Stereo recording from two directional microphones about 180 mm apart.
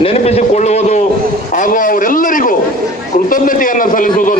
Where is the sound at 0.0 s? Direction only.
35° left (ahead or behind).